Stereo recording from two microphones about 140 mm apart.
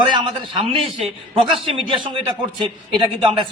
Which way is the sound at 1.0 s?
40° right (ahead or behind).